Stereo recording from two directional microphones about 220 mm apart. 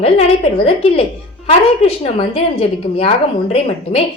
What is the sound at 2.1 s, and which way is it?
Speech, 25° left (ahead or behind).